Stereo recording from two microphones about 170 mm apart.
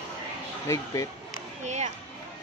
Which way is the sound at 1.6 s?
45° right (ahead or behind).